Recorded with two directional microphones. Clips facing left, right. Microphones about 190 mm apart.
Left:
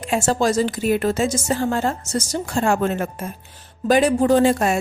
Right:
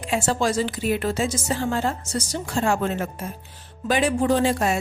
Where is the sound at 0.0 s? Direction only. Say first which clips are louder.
Left 3 dB; 45° left (ahead or behind).